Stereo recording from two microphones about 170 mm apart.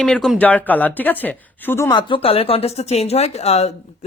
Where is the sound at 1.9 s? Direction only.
30° left (ahead or behind).